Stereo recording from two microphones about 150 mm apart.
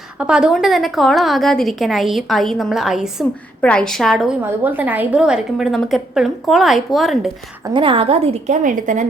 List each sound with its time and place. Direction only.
0.2 s a woman's voice: 5° right (ahead or behind)
4.6 s a woman's voice: 10° right (ahead or behind)
7.7 s a woman's voice: 35° right (ahead or behind)
8.6 s a woman's voice: 60° right (ahead or behind)